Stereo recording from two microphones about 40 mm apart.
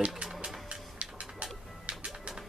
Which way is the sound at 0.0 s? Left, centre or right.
Right.